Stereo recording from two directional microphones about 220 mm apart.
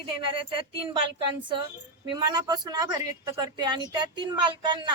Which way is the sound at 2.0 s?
20° right (ahead or behind).